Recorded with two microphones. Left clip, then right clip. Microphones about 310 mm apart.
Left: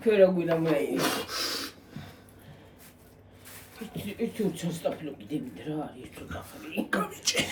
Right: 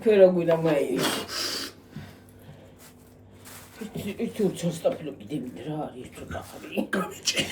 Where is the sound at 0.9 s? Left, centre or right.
Centre.